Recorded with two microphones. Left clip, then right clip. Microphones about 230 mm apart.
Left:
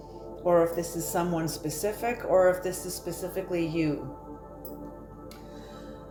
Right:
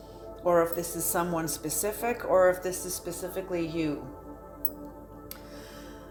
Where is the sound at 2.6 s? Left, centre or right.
Right.